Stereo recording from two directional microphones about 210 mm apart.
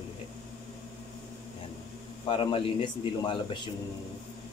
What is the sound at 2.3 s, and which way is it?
Speech, 25° left (ahead or behind).